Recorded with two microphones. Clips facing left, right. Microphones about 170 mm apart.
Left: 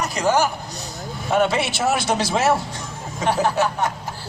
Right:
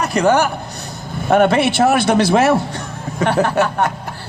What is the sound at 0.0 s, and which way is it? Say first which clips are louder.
A man's voice: right 5 dB; 60° right (ahead or behind).